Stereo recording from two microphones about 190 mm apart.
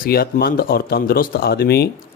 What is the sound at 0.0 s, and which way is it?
Speech, 50° left (ahead or behind).